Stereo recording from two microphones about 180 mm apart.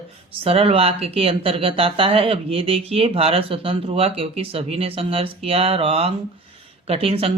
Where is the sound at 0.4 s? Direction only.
35° right (ahead or behind).